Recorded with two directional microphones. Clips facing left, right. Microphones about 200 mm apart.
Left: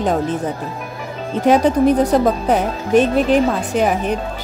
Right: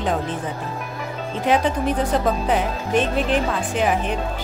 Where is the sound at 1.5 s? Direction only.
40° left (ahead or behind).